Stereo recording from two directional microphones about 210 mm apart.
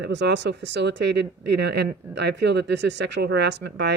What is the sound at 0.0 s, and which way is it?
Speech, 55° right (ahead or behind).